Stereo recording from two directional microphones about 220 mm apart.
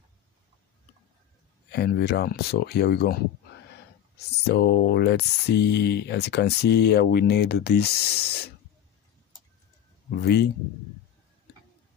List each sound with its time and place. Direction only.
1.7 s speech: 50° left (ahead or behind)
4.5 s speech: 45° left (ahead or behind)
10.1 s speech: 45° left (ahead or behind)